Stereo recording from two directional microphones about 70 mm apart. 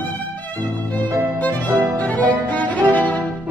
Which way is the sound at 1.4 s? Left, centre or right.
Left.